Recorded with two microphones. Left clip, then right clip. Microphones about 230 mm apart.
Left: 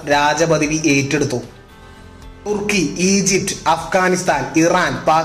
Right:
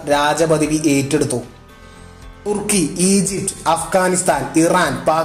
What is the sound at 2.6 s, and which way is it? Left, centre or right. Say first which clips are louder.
A man's voice: left 3 dB; right.